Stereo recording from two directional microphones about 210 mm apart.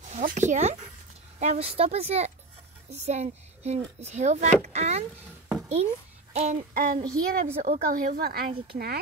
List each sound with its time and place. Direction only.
0.1 s speech: 35° right (ahead or behind)
6.3 s speech: 35° right (ahead or behind)
7.0 s a woman's voice: 15° right (ahead or behind)
7.5 s a woman's voice: 30° right (ahead or behind)
7.9 s a woman's voice: 45° right (ahead or behind)